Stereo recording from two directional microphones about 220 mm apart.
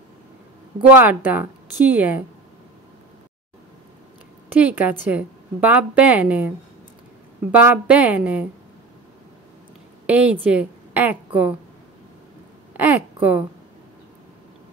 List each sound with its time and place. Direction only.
0.9 s a woman's voice: 10° right (ahead or behind)
4.5 s a woman's voice: 5° right (ahead or behind)
7.5 s a woman's voice: 5° right (ahead or behind)
10.0 s a woman's voice: 5° right (ahead or behind)
12.7 s a sound: 10° right (ahead or behind)